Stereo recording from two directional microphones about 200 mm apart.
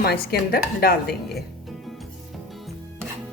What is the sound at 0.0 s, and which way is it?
Speech, 50° left (ahead or behind).